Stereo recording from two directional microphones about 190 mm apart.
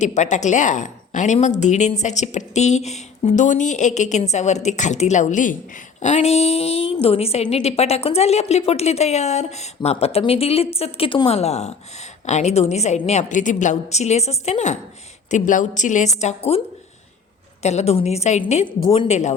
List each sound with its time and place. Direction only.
0.0 s a woman's voice: 40° left (ahead or behind)
17.6 s a woman's voice: 35° left (ahead or behind)
18.8 s speech: 20° left (ahead or behind)
19.0 s a woman's voice: 35° left (ahead or behind)